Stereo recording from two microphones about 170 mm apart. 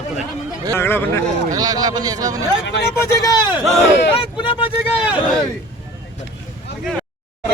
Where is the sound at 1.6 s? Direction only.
20° right (ahead or behind).